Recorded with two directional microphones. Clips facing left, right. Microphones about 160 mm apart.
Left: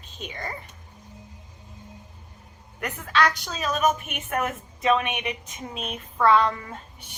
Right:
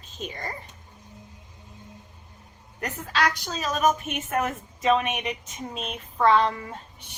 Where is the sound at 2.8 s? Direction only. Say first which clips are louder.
Left 3 dB; 35° right (ahead or behind).